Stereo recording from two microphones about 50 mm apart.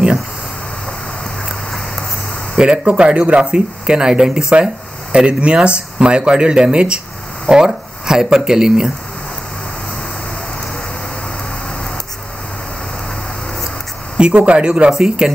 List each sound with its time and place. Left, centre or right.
2.5 s speech: centre
14.1 s speech: right